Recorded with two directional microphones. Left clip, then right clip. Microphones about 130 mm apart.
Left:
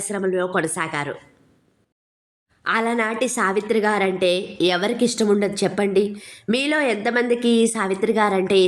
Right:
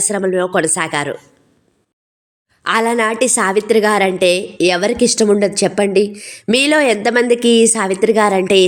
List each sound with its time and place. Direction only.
0.0 s a woman's voice: 40° right (ahead or behind)
2.6 s a woman's voice: 40° right (ahead or behind)
6.5 s a woman's voice: 45° right (ahead or behind)